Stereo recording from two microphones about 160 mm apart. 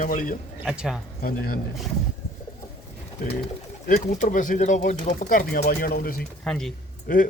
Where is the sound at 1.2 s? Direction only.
70° left (ahead or behind).